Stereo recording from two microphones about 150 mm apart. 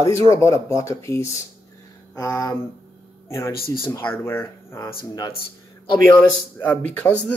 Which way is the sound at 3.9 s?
15° left (ahead or behind).